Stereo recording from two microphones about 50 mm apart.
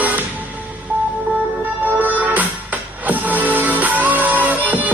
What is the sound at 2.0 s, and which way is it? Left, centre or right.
Music, right.